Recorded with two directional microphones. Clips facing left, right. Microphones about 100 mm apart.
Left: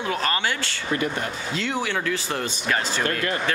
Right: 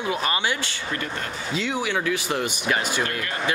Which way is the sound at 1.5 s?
10° right (ahead or behind).